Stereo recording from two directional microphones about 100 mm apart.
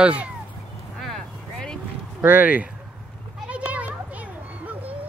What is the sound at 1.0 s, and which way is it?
Vehicle, 5° left (ahead or behind).